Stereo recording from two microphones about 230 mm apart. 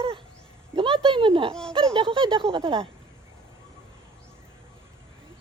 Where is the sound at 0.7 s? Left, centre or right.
Right.